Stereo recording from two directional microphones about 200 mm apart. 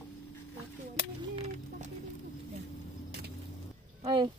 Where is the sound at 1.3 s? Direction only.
30° right (ahead or behind).